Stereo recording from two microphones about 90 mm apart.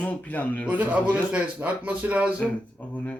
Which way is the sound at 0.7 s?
20° right (ahead or behind).